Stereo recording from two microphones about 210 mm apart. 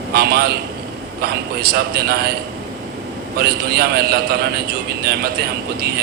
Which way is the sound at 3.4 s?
50° right (ahead or behind).